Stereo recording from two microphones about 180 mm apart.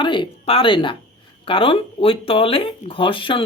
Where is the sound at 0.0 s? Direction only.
25° left (ahead or behind).